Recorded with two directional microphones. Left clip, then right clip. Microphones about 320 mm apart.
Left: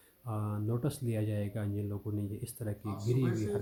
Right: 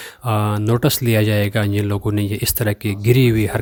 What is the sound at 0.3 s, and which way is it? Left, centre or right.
Speech, right.